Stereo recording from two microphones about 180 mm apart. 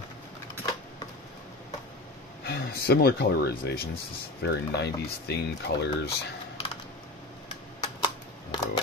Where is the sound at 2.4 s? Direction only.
60° left (ahead or behind).